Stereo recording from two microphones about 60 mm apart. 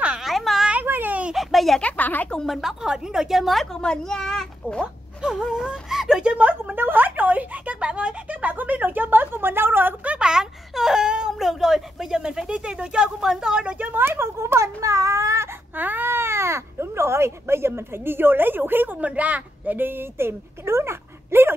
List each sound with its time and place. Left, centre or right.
0.2 s a sound: centre
0.8 s a sound: right
1.3 s a sound: centre
1.8 s speech: left
2.4 s speech: centre
3.8 s speech: centre
5.2 s speech: centre
6.2 s speech: right
10.0 s speech: centre
13.7 s speech: right
14.0 s speech: right
15.7 s speech: right